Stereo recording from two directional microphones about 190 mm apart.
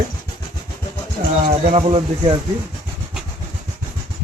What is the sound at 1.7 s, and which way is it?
Speech, 30° right (ahead or behind).